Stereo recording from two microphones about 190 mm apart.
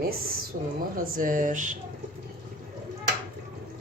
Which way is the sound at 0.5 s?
45° right (ahead or behind).